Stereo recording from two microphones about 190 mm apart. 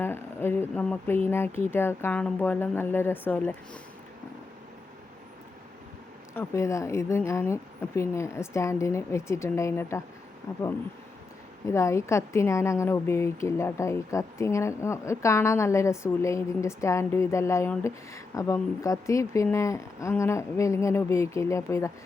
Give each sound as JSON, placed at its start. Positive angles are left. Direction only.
{"t": 0.0, "sound": "a woman's voice", "side_deg": 10}
{"t": 6.3, "sound": "a woman's voice", "side_deg": 15}
{"t": 11.6, "sound": "a woman's voice", "side_deg": 15}